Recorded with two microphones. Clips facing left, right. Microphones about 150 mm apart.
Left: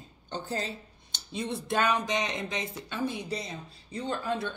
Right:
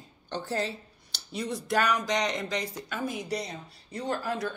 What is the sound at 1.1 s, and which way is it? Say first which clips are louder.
A woman's voice: even; 25° left (ahead or behind).